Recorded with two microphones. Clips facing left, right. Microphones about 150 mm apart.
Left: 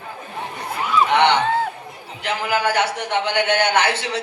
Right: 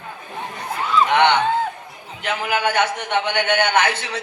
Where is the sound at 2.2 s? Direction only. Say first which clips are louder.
Even; 35° left (ahead or behind).